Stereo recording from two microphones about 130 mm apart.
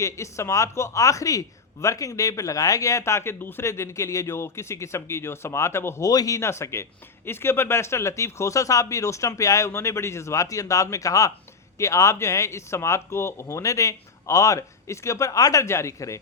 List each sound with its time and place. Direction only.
0.0 s speech: 20° left (ahead or behind)